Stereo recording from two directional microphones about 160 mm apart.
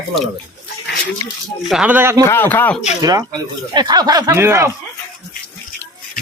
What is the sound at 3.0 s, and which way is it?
Speech, 25° right (ahead or behind).